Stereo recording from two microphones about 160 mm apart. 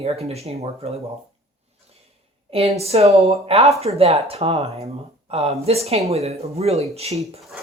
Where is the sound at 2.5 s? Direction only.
40° right (ahead or behind).